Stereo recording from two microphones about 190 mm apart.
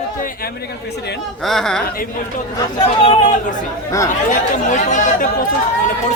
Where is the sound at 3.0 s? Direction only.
35° left (ahead or behind).